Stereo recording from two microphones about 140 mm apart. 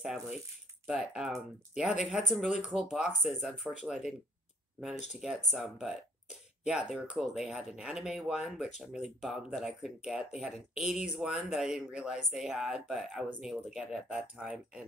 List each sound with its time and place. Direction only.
0.0 s speech: 5° right (ahead or behind)
5.2 s speech: centre (ahead or behind)